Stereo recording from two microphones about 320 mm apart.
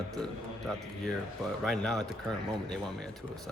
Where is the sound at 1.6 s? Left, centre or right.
Centre.